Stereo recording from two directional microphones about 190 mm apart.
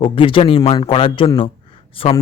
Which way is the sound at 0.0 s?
30° left (ahead or behind).